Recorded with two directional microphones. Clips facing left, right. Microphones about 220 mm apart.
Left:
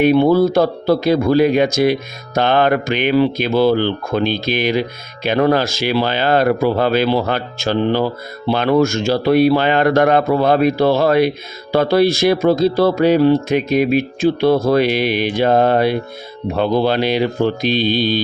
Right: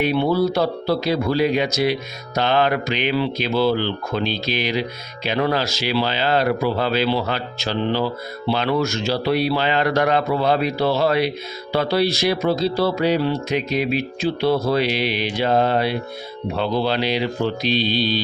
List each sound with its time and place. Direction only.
0.0 s speech: 50° left (ahead or behind)